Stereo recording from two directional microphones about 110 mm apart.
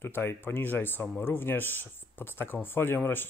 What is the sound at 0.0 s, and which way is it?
Speech, 20° left (ahead or behind).